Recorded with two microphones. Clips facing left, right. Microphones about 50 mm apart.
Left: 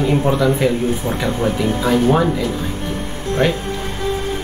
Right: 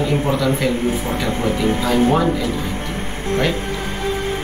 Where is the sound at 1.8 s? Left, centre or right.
Centre.